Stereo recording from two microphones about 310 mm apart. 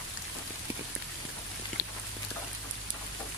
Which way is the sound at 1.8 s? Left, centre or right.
Left.